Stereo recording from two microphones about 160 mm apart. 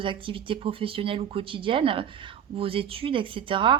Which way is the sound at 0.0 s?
35° right (ahead or behind).